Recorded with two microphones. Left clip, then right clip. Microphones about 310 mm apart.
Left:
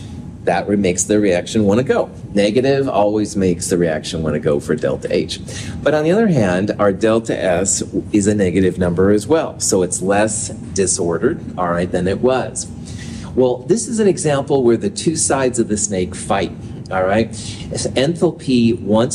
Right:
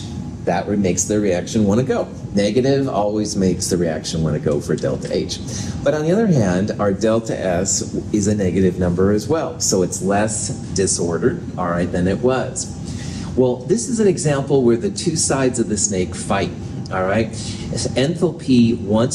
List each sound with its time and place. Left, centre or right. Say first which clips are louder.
0.5 s speech: left 3 dB; left